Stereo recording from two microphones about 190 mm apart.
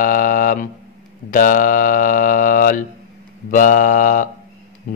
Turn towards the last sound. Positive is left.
turn(degrees=45)  # may be behind; listen again after turning